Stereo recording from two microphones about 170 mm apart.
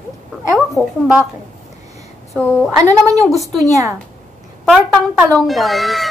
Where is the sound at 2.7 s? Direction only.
20° right (ahead or behind).